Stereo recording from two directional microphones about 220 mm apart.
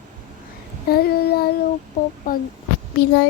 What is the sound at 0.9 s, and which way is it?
Child singing, 45° left (ahead or behind).